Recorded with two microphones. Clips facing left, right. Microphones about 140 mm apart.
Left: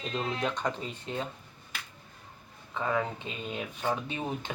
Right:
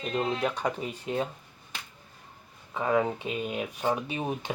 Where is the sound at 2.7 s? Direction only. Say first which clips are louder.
Right 4 dB; 15° right (ahead or behind).